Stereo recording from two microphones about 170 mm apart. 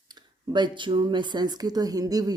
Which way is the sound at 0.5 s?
25° right (ahead or behind).